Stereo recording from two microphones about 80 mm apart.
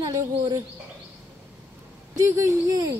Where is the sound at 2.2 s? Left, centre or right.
Right.